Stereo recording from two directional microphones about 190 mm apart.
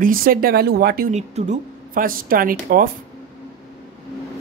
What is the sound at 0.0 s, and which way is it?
A woman's voice, 50° right (ahead or behind).